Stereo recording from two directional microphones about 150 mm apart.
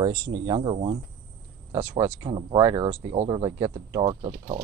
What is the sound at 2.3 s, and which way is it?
Speech, 40° right (ahead or behind).